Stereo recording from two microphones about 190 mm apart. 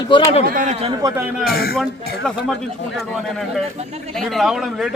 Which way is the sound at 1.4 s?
55° left (ahead or behind).